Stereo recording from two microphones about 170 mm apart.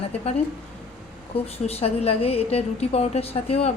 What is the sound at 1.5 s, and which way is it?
A woman's voice, 35° left (ahead or behind).